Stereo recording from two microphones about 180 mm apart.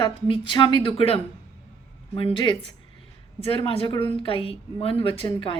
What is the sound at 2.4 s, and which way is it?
A woman's voice, 25° left (ahead or behind).